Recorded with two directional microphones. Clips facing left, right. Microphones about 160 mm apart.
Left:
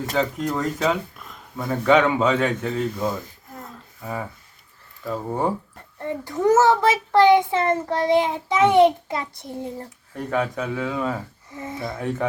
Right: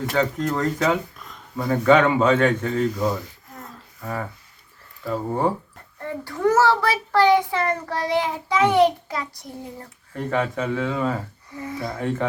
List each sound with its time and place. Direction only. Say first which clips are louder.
0.1 s speech: right 1 dB; 10° left (ahead or behind)
3.6 s a sound: right 1 dB; 5° left (ahead or behind)
5.0 s speech: right 1 dB; centre (ahead or behind)
6.0 s a child's voice: left 1 dB; 20° left (ahead or behind)
10.1 s speech: right 1 dB; centre (ahead or behind)
11.5 s a child's voice: right 1 dB; 25° left (ahead or behind)
11.8 s speech: right 1 dB; centre (ahead or behind)